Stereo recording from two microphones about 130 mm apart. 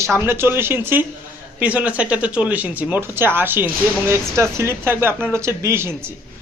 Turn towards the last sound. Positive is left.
turn(degrees=-20)  # may be behind; listen again after turning